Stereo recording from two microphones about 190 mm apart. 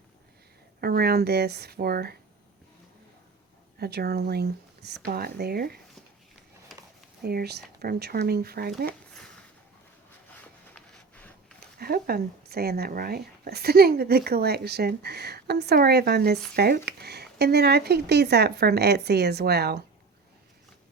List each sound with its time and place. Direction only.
0.8 s speech: 55° right (ahead or behind)
3.8 s speech: 55° right (ahead or behind)
7.2 s speech: 55° right (ahead or behind)
10.8 s a sound: 5° left (ahead or behind)
11.8 s speech: 50° right (ahead or behind)